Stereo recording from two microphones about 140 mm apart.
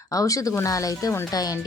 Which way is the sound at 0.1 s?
25° left (ahead or behind).